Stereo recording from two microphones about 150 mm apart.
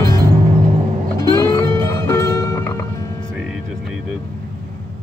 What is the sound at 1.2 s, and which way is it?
Music, 20° left (ahead or behind).